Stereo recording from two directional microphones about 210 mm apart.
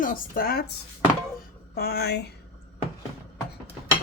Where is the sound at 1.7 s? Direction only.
50° left (ahead or behind).